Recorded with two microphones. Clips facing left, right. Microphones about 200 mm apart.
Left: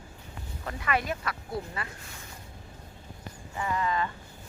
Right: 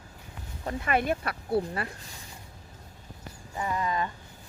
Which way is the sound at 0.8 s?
50° right (ahead or behind).